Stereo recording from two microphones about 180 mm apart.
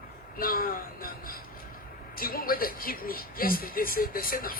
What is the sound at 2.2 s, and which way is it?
Speech, 55° left (ahead or behind).